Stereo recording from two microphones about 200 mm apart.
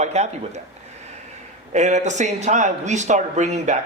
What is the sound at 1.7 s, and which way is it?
Speech, 35° right (ahead or behind).